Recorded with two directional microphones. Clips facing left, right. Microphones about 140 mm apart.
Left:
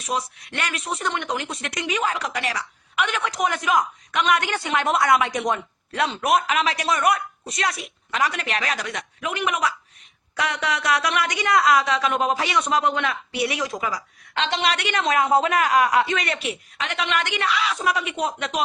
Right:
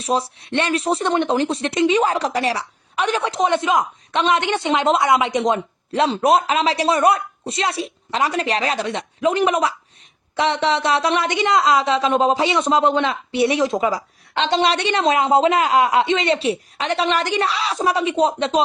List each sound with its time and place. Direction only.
0.0 s speech: 30° right (ahead or behind)